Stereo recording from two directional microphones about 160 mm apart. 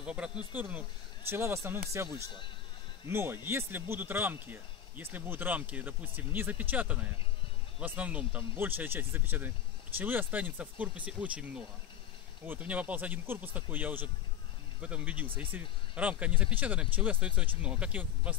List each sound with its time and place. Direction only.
0.0 s speech: 5° right (ahead or behind)
2.2 s a man's voice: 30° left (ahead or behind)
3.1 s speech: 15° right (ahead or behind)